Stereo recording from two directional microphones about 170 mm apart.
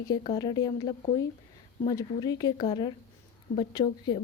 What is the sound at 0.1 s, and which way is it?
Speech, 25° left (ahead or behind).